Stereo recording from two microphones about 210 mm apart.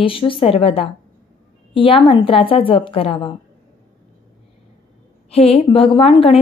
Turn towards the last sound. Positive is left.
turn(degrees=25)  # may be behind; listen again after turning